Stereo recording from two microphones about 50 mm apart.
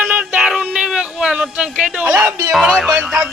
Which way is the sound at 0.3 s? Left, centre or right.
Centre.